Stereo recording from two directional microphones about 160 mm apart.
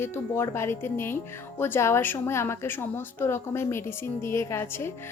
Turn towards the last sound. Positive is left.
turn(degrees=15)  # may be behind; listen again after turning